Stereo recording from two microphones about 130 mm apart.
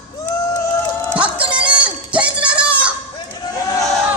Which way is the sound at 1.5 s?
10° right (ahead or behind).